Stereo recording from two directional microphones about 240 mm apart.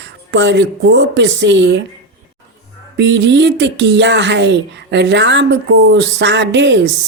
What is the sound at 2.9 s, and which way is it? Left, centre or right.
Speech, right.